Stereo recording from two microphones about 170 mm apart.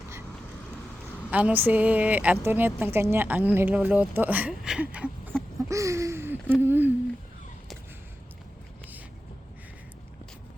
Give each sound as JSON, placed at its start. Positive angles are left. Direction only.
{"t": 1.3, "sound": "a woman's voice", "side_deg": -10}
{"t": 5.6, "sound": "a sound", "side_deg": -20}
{"t": 6.6, "sound": "a woman's voice", "side_deg": -10}